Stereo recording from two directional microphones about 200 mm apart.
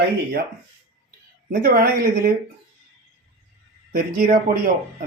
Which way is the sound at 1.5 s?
50° right (ahead or behind).